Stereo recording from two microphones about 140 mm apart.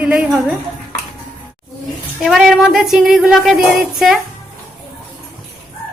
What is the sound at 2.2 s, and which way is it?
Speech, centre (ahead or behind).